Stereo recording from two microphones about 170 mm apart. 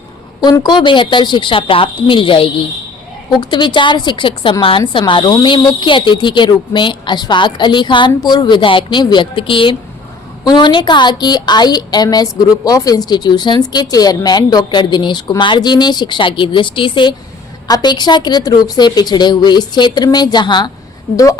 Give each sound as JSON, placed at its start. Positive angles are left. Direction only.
{"t": 0.4, "sound": "a woman's voice", "side_deg": 25}
{"t": 3.5, "sound": "a woman's voice", "side_deg": 25}